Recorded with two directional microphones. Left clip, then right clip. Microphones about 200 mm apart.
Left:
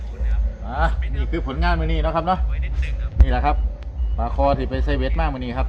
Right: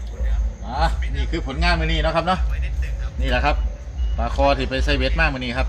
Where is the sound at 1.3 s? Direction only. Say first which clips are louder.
Right 2 dB; 20° right (ahead or behind).